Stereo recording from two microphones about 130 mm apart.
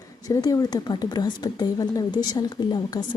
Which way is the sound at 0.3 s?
25° left (ahead or behind).